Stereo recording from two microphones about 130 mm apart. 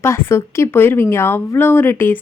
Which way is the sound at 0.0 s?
20° left (ahead or behind).